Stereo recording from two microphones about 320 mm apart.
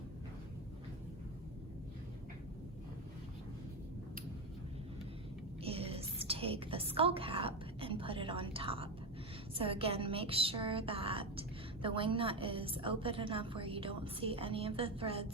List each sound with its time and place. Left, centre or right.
5.6 s a woman's voice: centre